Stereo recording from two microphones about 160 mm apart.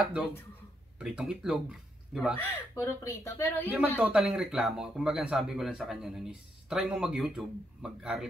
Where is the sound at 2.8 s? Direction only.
15° left (ahead or behind).